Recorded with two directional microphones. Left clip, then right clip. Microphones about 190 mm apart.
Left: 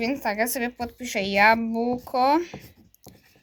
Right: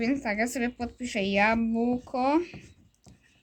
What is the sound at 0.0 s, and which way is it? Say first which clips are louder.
A woman's voice: left 3 dB; 5° right (ahead or behind).